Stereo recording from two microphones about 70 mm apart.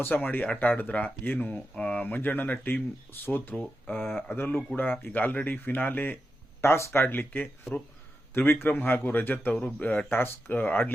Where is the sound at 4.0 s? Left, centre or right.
Centre.